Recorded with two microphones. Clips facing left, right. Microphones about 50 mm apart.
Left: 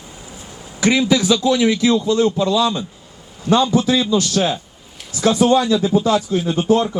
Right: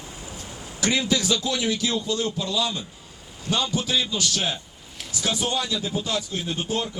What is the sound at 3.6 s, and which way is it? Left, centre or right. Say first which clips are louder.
A man's voice: left 9 dB; left.